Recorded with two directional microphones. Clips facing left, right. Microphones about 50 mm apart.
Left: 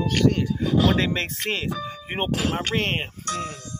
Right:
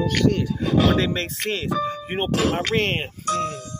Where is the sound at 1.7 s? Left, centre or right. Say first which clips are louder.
Right 6 dB; right.